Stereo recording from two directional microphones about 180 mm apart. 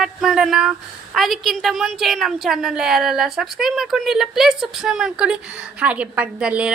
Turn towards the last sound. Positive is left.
turn(degrees=-5)  # may be behind; listen again after turning